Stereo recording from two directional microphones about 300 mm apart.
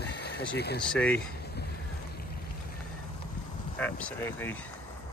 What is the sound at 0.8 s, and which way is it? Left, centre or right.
Speech, centre.